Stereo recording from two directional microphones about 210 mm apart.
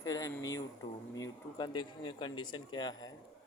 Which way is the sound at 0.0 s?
15° left (ahead or behind).